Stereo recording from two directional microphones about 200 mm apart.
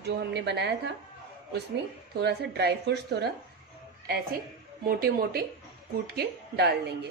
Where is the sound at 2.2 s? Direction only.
55° right (ahead or behind).